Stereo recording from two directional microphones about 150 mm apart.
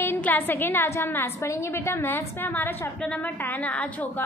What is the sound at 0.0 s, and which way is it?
A woman's voice, 15° left (ahead or behind).